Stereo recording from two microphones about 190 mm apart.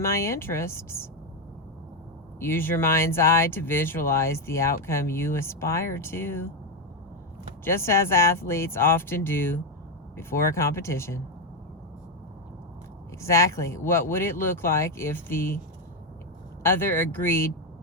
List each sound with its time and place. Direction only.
0.0 s speech: 15° left (ahead or behind)
2.4 s speech: 10° left (ahead or behind)
7.6 s speech: 15° left (ahead or behind)
13.2 s speech: 15° left (ahead or behind)
16.6 s speech: 10° left (ahead or behind)